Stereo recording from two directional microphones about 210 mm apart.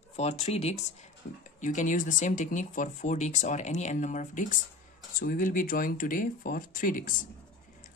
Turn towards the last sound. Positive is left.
turn(degrees=40)  # may be behind; listen again after turning